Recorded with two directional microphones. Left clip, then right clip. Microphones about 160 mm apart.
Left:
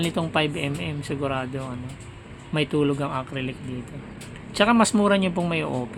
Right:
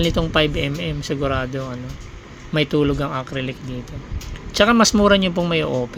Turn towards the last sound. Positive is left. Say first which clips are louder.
# right 6 dB
turn(degrees=-25)  # may be behind; listen again after turning